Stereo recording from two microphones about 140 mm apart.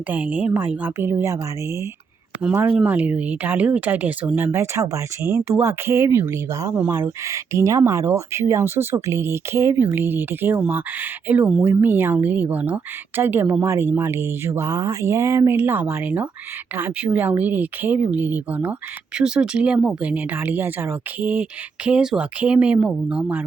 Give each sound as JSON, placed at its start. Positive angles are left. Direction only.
{"t": 0.1, "sound": "speech", "side_deg": -10}